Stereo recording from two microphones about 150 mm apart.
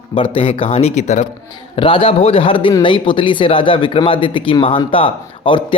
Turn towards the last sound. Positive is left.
turn(degrees=35)  # may be behind; listen again after turning